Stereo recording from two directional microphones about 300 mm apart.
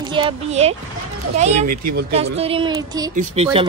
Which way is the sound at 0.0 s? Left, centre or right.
Centre.